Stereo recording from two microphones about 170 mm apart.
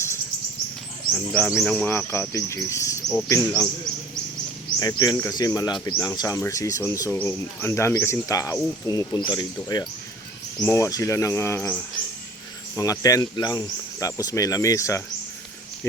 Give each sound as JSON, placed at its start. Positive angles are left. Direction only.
{"t": 1.1, "sound": "speech", "side_deg": 5}
{"t": 4.8, "sound": "speech", "side_deg": 25}